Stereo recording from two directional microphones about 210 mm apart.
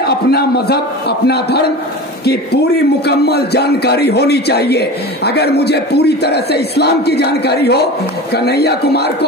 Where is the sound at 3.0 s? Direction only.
50° left (ahead or behind).